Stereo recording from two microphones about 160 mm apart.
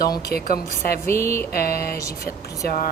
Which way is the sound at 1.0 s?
15° left (ahead or behind).